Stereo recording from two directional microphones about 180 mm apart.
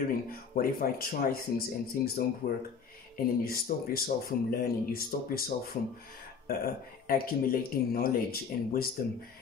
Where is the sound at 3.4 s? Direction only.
55° left (ahead or behind).